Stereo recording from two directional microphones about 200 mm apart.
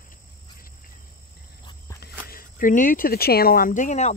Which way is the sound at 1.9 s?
50° left (ahead or behind).